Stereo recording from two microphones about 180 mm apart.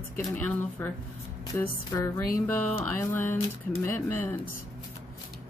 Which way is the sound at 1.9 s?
15° left (ahead or behind).